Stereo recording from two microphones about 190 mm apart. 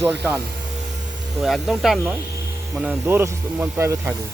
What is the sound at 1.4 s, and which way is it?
Speech, centre (ahead or behind).